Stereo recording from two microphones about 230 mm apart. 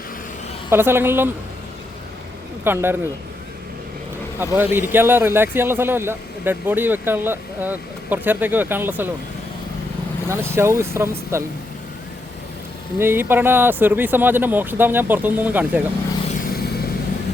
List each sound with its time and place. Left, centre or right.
0.7 s a man's voice: centre
2.6 s a man's voice: centre
4.4 s a man's voice: centre
10.2 s a man's voice: centre
13.0 s a man's voice: centre
16.5 s vehicle: left